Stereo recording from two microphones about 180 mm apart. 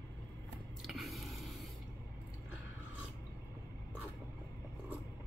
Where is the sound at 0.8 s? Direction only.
Centre (ahead or behind).